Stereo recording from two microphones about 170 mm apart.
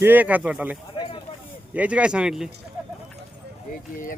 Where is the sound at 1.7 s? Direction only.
5° right (ahead or behind).